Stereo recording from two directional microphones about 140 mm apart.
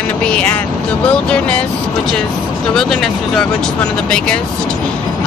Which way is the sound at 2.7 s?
5° left (ahead or behind).